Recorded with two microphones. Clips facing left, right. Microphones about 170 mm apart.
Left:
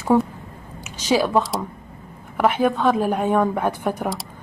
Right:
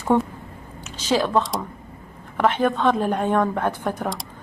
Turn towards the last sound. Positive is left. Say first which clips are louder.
# left 2 dB
turn(degrees=10)  # may be behind; listen again after turning